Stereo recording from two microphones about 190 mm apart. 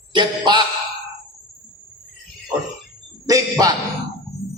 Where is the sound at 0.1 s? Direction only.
25° right (ahead or behind).